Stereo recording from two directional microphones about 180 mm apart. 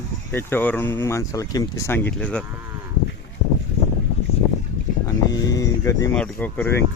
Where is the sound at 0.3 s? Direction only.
10° left (ahead or behind).